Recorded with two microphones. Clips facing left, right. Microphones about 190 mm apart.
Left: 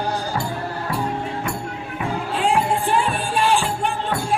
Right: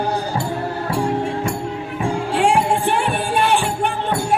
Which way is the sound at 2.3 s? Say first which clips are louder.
Right 3 dB; 75° right (ahead or behind).